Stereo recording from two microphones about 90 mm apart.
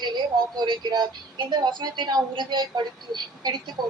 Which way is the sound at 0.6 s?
50° right (ahead or behind).